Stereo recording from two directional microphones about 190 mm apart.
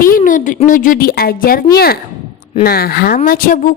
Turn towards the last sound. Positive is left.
turn(degrees=45)  # may be behind; listen again after turning